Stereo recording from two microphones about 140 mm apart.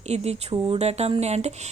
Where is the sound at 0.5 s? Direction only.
35° right (ahead or behind).